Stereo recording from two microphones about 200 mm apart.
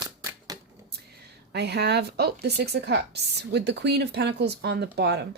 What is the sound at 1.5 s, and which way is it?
A woman's voice, 55° right (ahead or behind).